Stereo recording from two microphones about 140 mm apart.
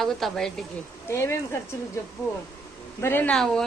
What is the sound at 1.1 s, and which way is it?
Speech, 20° left (ahead or behind).